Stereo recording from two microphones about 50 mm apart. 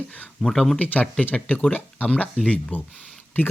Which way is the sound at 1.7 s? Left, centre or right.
Left.